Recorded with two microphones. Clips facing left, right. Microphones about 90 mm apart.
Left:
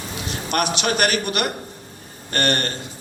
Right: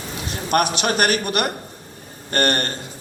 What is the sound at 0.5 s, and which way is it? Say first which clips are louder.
A man's voice: right 3 dB; 45° right (ahead or behind).